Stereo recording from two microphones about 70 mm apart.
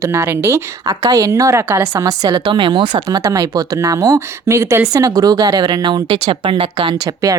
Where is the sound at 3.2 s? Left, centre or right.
Right.